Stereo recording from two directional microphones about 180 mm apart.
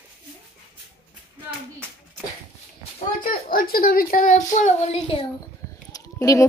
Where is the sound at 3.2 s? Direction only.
55° left (ahead or behind); by 5.2 s 35° left (ahead or behind).